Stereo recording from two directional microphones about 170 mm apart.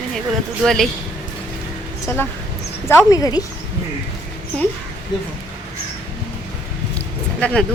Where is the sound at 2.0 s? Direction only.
10° left (ahead or behind).